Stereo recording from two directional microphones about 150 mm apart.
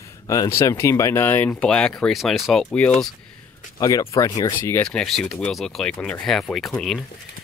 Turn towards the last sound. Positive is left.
turn(degrees=0)  # may be behind; listen again after turning